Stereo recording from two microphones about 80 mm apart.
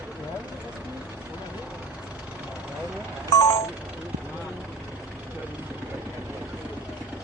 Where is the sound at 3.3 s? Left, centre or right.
Left.